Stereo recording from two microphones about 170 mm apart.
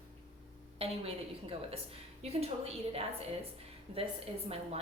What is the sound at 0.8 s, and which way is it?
A woman's voice, 35° right (ahead or behind).